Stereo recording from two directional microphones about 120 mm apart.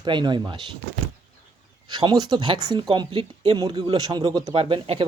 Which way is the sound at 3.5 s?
35° right (ahead or behind).